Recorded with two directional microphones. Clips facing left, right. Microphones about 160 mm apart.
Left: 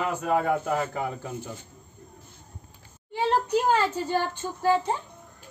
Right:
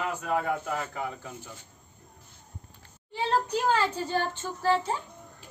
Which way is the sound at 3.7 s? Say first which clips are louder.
Left 3 dB; 15° left (ahead or behind).